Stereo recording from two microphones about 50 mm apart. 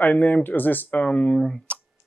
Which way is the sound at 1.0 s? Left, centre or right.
Left.